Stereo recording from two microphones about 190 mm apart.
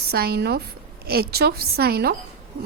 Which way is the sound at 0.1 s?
55° right (ahead or behind).